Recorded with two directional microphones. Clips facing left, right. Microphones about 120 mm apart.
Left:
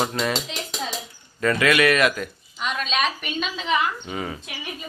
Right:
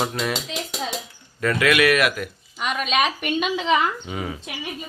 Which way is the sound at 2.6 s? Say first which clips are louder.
Right 3 dB; 10° right (ahead or behind).